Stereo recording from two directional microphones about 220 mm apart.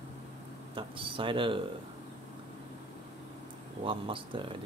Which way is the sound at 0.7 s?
25° right (ahead or behind).